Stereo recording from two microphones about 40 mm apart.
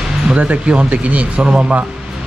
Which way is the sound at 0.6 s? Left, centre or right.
Right.